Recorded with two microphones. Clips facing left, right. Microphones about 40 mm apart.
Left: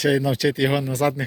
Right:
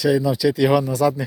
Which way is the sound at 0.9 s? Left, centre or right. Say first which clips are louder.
Right 3 dB; left.